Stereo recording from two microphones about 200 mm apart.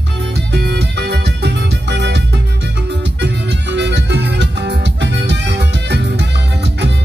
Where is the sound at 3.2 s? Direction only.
60° right (ahead or behind).